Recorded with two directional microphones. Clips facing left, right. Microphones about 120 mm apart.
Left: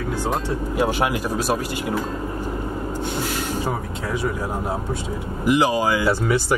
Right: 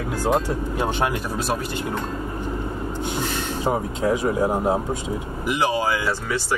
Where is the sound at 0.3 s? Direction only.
10° left (ahead or behind).